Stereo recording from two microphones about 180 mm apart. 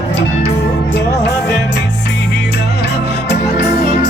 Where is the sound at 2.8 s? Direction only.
70° left (ahead or behind).